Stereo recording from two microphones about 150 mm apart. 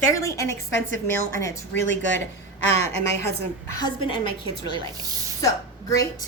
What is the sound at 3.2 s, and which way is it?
Speech, 20° left (ahead or behind).